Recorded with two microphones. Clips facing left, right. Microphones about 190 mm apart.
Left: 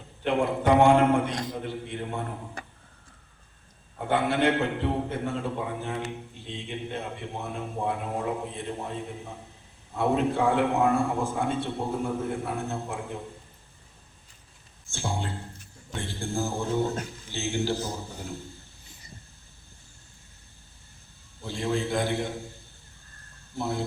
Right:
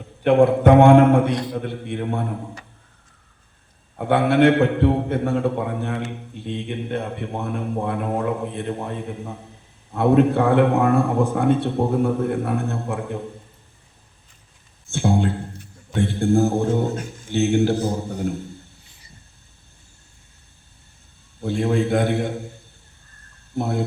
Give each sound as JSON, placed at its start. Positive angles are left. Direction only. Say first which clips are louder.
{"t": 0.3, "sound": "a man's voice", "louder": "right 9 dB", "side_deg": -55}
{"t": 1.3, "sound": "a man's voice", "louder": "right 8 dB", "side_deg": 45}
{"t": 1.5, "sound": "a man's voice", "louder": "right 6 dB", "side_deg": -60}
{"t": 3.9, "sound": "a man's voice", "louder": "right 8 dB", "side_deg": -65}
{"t": 14.8, "sound": "a man's voice", "louder": "right 12 dB", "side_deg": -60}
{"t": 21.4, "sound": "a man's voice", "louder": "right 8 dB", "side_deg": -60}
{"t": 23.6, "sound": "a man's voice", "louder": "right 6 dB", "side_deg": -60}